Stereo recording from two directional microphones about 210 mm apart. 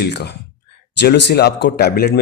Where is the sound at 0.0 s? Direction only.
55° left (ahead or behind).